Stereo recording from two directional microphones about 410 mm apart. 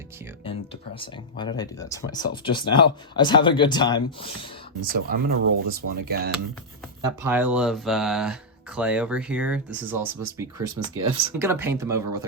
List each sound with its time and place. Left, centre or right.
0.4 s speech: centre
4.9 s speech: right
7.2 s speech: centre